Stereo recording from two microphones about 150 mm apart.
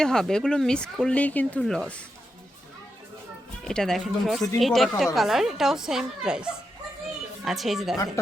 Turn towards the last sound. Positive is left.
turn(degrees=0)  # may be behind; listen again after turning